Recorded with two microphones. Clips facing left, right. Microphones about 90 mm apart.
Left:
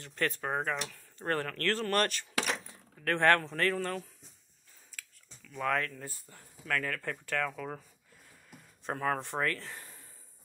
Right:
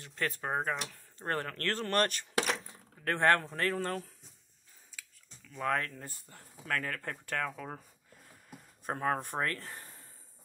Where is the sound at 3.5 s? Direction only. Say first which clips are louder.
Left 2 dB; 30° right (ahead or behind).